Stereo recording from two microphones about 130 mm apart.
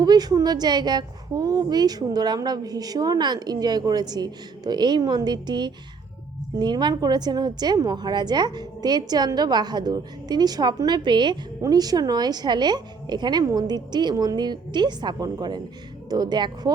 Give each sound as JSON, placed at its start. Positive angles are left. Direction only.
{"t": 0.0, "sound": "a woman's voice", "side_deg": -30}